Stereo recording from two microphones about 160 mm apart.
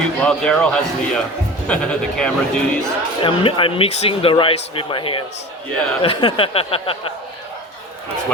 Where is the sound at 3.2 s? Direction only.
35° left (ahead or behind).